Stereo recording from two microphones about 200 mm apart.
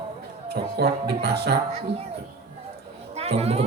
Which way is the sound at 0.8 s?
50° right (ahead or behind).